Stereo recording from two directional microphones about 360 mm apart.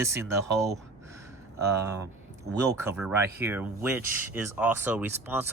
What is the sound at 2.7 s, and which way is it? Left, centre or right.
Speech, centre.